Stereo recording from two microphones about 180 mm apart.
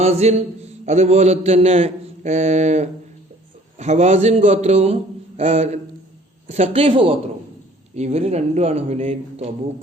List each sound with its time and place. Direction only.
0.0 s a man's voice: 35° right (ahead or behind)